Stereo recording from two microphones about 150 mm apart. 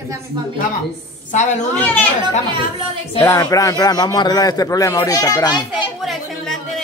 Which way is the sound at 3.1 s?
20° left (ahead or behind).